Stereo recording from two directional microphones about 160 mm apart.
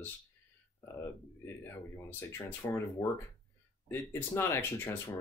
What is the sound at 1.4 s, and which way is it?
Speech, 15° left (ahead or behind).